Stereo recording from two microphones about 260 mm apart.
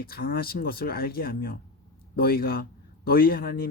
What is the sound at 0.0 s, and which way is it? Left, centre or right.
A man's voice, left.